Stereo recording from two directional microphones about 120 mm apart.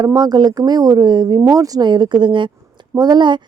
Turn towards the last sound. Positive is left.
turn(degrees=-40)  # may be behind; listen again after turning